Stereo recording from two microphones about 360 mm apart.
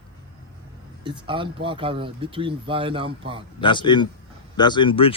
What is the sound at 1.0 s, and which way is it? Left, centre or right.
Speech, centre.